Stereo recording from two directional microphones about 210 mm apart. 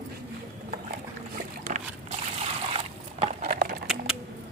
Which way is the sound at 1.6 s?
35° right (ahead or behind).